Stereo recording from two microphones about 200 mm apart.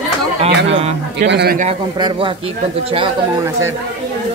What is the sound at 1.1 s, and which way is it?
Speech, 55° right (ahead or behind).